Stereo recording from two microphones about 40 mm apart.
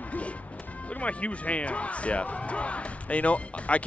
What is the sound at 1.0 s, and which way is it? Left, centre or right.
Speech, left.